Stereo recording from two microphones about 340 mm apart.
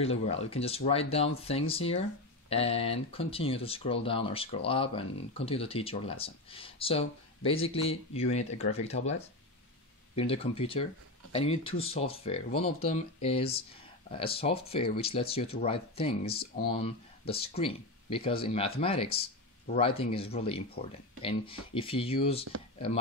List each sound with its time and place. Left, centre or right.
0.0 s speech: centre
10.1 s speech: centre